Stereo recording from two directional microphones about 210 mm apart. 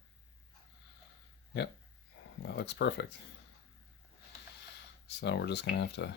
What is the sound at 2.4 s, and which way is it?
Speech, 55° left (ahead or behind).